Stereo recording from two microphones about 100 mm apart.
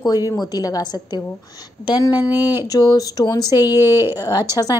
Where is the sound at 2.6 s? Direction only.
45° left (ahead or behind).